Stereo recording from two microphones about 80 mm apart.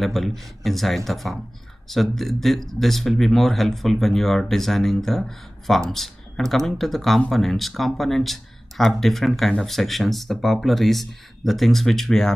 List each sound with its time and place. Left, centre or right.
0.0 s speech: centre